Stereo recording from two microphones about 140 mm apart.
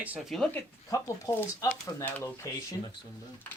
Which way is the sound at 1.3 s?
35° left (ahead or behind).